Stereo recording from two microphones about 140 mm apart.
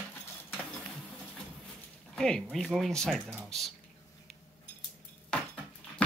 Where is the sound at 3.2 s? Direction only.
10° right (ahead or behind).